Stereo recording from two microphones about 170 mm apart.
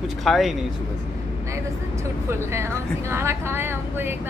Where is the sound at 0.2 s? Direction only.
Centre (ahead or behind).